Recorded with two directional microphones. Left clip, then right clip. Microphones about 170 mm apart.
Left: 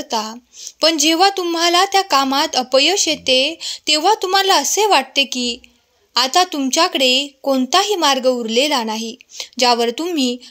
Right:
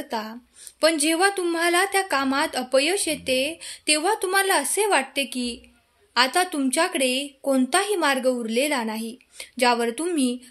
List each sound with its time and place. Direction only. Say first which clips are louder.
0.0 s a woman's voice: left 8 dB; 25° left (ahead or behind)